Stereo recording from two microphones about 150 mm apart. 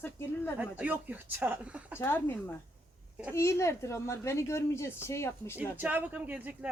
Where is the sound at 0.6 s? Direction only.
10° right (ahead or behind).